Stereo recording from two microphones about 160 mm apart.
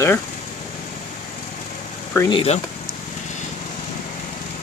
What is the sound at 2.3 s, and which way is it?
Speech, 40° left (ahead or behind).